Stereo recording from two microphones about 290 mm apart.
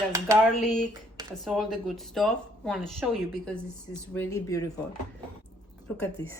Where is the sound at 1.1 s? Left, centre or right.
Centre.